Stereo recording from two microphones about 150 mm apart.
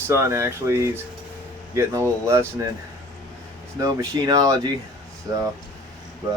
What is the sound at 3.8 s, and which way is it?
Speech, 25° right (ahead or behind).